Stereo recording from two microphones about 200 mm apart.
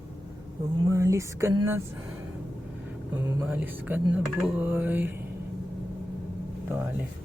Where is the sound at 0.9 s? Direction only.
15° right (ahead or behind).